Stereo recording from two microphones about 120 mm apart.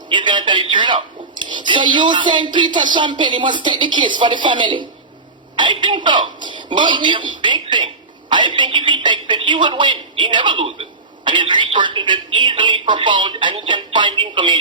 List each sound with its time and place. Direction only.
0.1 s a woman's voice: 40° right (ahead or behind)